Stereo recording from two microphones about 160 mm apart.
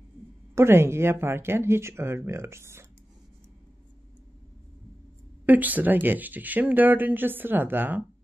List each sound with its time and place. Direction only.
0.6 s speech: 15° right (ahead or behind)
5.4 s speech: 10° right (ahead or behind)